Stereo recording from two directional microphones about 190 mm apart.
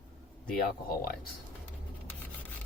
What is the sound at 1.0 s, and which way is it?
Speech, 50° left (ahead or behind).